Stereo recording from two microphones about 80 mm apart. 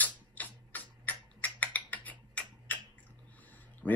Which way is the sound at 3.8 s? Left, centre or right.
Centre.